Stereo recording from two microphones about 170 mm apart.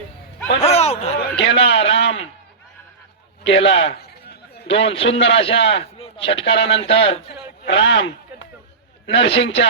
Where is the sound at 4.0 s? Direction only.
70° left (ahead or behind).